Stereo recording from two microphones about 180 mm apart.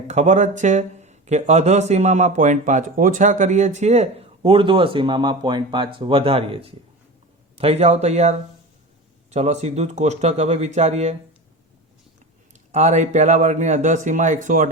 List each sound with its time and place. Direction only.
0.1 s speech: 40° right (ahead or behind)
12.7 s speech: 40° right (ahead or behind)